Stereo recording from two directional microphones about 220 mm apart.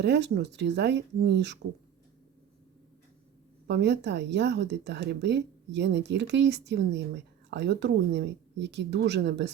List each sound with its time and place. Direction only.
0.0 s a woman's voice: 50° right (ahead or behind)
3.7 s a woman's voice: 50° right (ahead or behind)